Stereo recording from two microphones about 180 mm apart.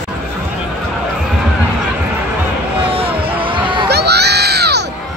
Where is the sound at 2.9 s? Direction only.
30° right (ahead or behind).